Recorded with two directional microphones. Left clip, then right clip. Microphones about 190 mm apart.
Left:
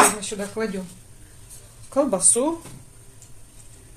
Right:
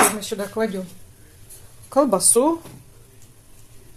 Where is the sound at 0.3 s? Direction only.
40° right (ahead or behind).